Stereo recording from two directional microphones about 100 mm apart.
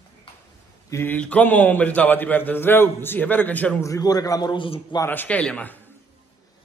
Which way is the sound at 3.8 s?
35° left (ahead or behind).